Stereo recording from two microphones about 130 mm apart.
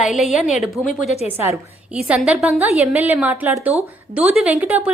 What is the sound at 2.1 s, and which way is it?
A woman's voice, 5° right (ahead or behind).